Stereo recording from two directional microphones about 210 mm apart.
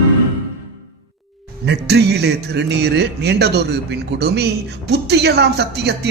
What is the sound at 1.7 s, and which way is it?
A man's voice, 50° right (ahead or behind).